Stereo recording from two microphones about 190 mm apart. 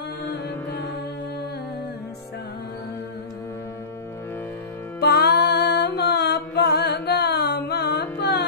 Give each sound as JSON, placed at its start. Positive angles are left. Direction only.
{"t": 5.0, "sound": "music", "side_deg": 55}